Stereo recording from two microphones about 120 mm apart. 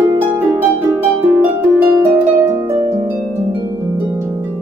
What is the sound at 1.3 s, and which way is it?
Harp, 20° right (ahead or behind).